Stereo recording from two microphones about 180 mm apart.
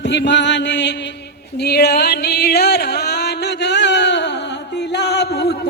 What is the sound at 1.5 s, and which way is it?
Music, 65° left (ahead or behind).